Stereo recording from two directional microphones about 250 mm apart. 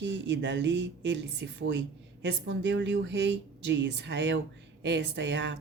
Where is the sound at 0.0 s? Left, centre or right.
Right.